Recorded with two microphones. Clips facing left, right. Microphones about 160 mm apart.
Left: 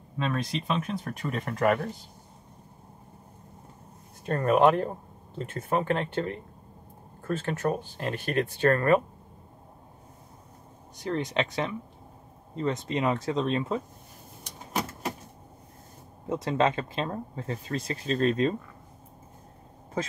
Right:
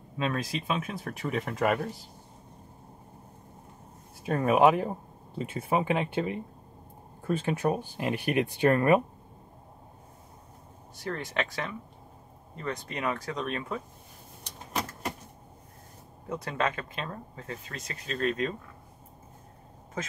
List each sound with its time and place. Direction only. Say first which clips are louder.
0.2 s speech: left 1 dB; 5° right (ahead or behind)
4.2 s speech: even; 5° right (ahead or behind)
11.0 s speech: left 4 dB; 20° left (ahead or behind)
16.3 s speech: left 5 dB; 25° left (ahead or behind)